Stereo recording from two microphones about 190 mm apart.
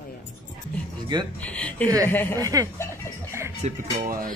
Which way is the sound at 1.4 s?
5° left (ahead or behind).